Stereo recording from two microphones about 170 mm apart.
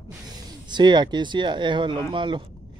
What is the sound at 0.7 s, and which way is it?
Speech, 25° right (ahead or behind).